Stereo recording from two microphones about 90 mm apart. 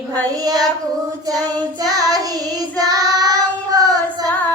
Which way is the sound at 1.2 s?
45° right (ahead or behind).